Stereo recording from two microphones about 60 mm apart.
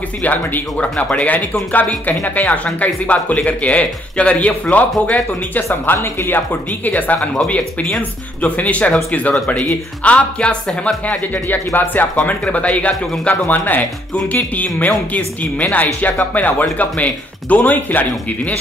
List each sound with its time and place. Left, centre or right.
0.2 s speech: left
5.9 s speech: left